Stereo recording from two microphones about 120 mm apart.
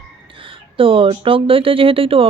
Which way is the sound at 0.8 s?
50° right (ahead or behind).